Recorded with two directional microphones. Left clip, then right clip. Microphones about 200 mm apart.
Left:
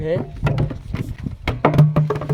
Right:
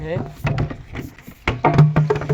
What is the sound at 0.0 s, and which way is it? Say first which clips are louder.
Speech: left 4 dB; 30° left (ahead or behind).